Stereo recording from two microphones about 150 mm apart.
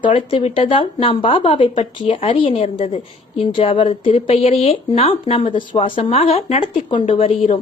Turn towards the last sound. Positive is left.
turn(degrees=40)  # may be behind; listen again after turning